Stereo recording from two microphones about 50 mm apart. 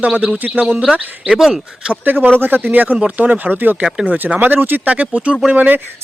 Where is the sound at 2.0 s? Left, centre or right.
Right.